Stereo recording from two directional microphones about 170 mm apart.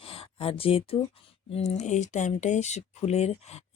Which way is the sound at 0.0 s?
35° left (ahead or behind).